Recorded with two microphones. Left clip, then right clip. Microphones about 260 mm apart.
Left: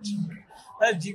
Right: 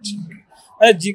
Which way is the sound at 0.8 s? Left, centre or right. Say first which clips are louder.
Right 11 dB; right.